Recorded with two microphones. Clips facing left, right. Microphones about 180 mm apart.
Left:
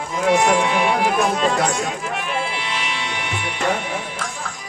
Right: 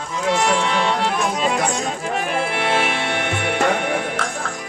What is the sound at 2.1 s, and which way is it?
Music, 45° right (ahead or behind).